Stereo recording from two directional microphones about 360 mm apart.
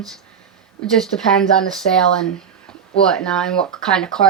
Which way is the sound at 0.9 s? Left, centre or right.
Centre.